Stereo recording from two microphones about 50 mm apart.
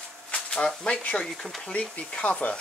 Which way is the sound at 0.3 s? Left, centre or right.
Left.